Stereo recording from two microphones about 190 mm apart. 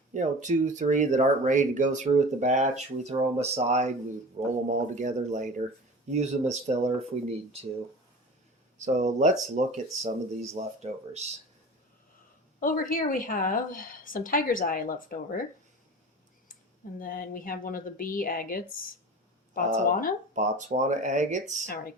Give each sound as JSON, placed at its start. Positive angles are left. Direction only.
{"t": 0.1, "sound": "speech", "side_deg": -40}
{"t": 8.8, "sound": "speech", "side_deg": -40}
{"t": 12.5, "sound": "a woman's voice", "side_deg": 45}
{"t": 17.0, "sound": "a woman's voice", "side_deg": 50}
{"t": 20.3, "sound": "speech", "side_deg": -40}